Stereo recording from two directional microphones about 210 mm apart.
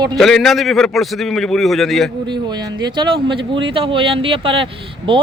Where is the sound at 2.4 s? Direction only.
20° right (ahead or behind).